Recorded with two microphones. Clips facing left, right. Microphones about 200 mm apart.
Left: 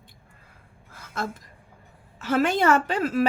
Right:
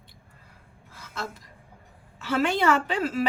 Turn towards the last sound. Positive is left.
turn(degrees=45)  # may be behind; listen again after turning